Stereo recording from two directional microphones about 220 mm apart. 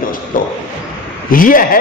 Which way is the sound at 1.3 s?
40° left (ahead or behind).